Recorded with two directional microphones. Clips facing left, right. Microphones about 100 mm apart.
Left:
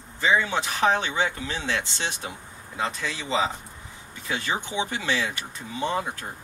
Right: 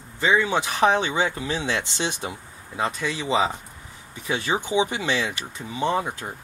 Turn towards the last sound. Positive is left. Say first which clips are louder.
# right 3 dB
turn(degrees=-15)  # may be behind; listen again after turning